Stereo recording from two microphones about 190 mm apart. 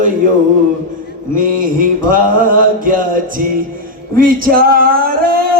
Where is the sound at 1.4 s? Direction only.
45° right (ahead or behind).